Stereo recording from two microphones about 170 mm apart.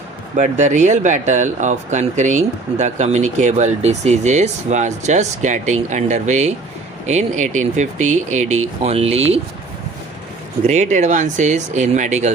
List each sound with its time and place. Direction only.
0.3 s speech: 45° right (ahead or behind)
10.7 s speech: 45° right (ahead or behind)